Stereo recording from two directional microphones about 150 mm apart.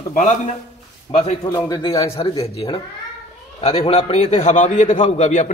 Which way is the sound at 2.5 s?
40° left (ahead or behind).